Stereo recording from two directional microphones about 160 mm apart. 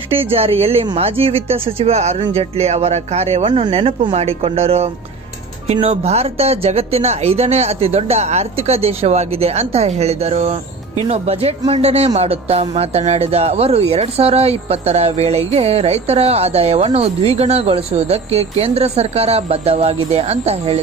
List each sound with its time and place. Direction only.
0.1 s speech: 35° right (ahead or behind)